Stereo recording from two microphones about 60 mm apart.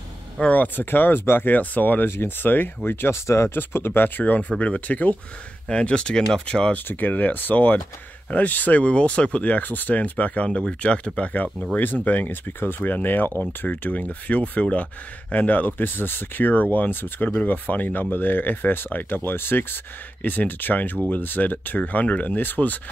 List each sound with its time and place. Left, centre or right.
0.4 s speech: left
3.3 s speech: left
3.5 s speech: left
4.2 s speech: left
6.7 s speech: left